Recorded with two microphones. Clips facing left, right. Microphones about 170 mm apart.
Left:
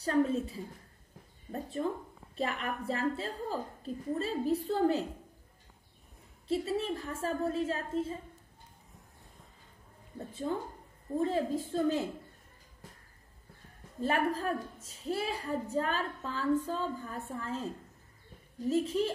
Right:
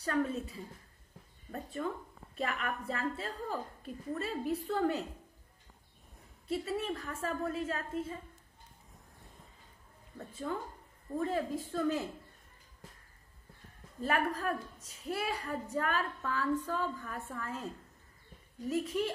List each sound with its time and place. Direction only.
0.0 s a woman's voice: 30° left (ahead or behind)
6.4 s a woman's voice: 25° left (ahead or behind)
10.1 s a woman's voice: 30° left (ahead or behind)
14.0 s a woman's voice: 30° left (ahead or behind)
18.7 s a woman's voice: 30° left (ahead or behind)